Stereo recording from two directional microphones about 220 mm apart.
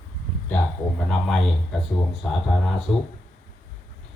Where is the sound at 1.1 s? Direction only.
5° left (ahead or behind).